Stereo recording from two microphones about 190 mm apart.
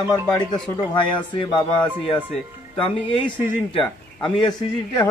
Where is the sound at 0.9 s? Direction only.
25° left (ahead or behind).